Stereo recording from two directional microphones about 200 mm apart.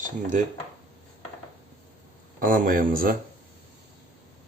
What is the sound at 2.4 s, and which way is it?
Speech, 40° right (ahead or behind).